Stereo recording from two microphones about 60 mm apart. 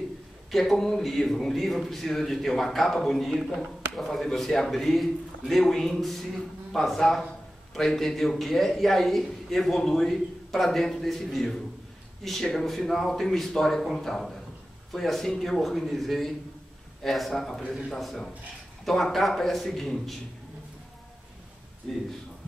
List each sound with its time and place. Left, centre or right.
0.5 s a man's voice: centre